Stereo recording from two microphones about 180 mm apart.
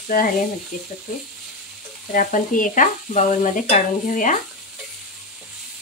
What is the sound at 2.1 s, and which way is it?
Stir, 50° left (ahead or behind).